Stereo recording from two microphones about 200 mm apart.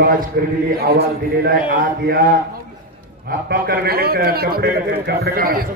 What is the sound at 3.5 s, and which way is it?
A man's voice, 50° right (ahead or behind).